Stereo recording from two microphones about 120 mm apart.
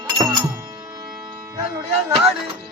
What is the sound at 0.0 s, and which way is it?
Music, 30° right (ahead or behind).